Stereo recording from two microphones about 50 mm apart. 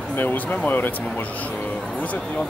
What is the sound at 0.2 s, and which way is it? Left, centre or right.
Speech, left.